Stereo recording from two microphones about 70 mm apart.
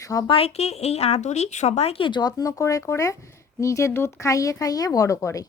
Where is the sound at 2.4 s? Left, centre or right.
Left.